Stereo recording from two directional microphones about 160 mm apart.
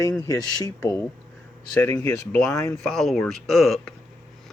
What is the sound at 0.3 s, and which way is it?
Speech, 20° left (ahead or behind).